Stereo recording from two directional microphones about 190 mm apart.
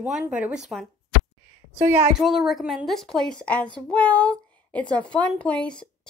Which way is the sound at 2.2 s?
Centre (ahead or behind).